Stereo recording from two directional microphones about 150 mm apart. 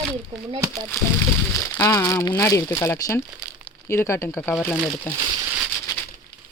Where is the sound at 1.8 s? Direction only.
20° left (ahead or behind).